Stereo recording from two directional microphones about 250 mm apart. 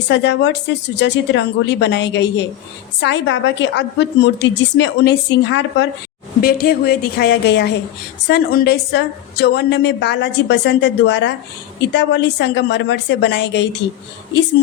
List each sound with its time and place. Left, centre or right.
0.1 s a woman's voice: left